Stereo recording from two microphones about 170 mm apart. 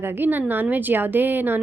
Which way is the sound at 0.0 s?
10° right (ahead or behind).